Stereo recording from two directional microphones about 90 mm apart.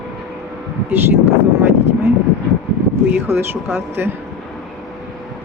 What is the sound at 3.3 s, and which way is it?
Speech, 25° right (ahead or behind).